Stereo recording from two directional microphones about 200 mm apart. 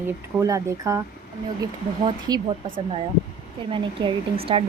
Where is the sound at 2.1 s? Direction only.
25° right (ahead or behind).